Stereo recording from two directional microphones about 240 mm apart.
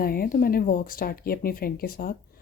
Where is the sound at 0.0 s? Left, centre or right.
Left.